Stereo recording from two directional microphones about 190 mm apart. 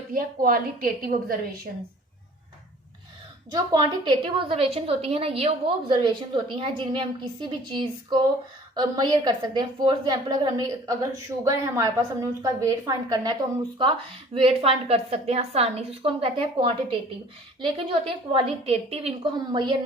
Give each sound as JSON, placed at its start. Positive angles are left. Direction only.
{"t": 0.1, "sound": "a woman's voice", "side_deg": -50}
{"t": 3.5, "sound": "a woman's voice", "side_deg": -20}
{"t": 14.3, "sound": "a woman's voice", "side_deg": -30}